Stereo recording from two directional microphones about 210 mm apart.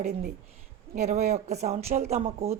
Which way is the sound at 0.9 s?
35° right (ahead or behind).